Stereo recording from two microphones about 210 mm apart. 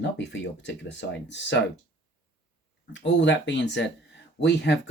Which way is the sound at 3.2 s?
60° left (ahead or behind).